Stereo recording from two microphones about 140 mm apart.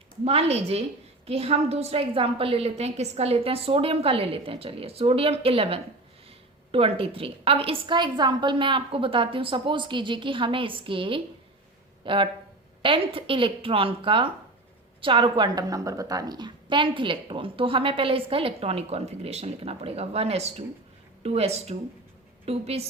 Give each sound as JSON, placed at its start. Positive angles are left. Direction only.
{"t": 0.3, "sound": "a woman's voice", "side_deg": -45}